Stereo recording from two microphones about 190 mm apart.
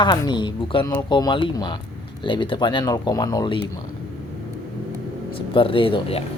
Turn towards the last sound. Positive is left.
turn(degrees=25)  # may be behind; listen again after turning